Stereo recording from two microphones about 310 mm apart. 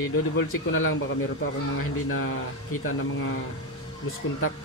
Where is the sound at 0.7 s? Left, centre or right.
Left.